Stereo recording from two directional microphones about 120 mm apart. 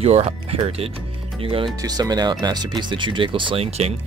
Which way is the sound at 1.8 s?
35° right (ahead or behind).